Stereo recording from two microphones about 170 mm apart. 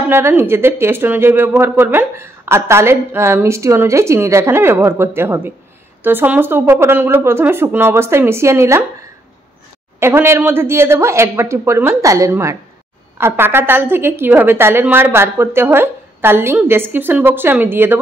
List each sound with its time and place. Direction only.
0.1 s a woman's voice: 15° right (ahead or behind)
9.9 s a woman's voice: 15° right (ahead or behind)